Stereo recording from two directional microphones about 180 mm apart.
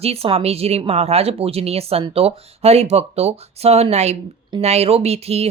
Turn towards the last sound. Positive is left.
turn(degrees=-35)  # may be behind; listen again after turning